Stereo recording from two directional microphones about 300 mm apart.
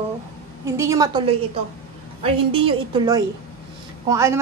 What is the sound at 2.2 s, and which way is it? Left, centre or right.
A woman's voice, centre.